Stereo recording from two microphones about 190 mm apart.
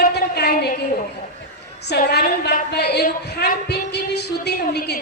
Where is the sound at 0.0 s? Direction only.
60° left (ahead or behind).